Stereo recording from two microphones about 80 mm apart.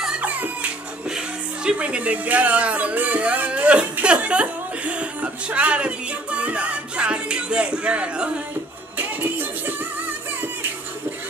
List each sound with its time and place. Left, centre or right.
0.2 s speech: centre
8.9 s music: right